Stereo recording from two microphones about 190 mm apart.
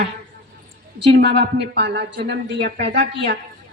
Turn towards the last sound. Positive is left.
turn(degrees=-65)  # may be behind; listen again after turning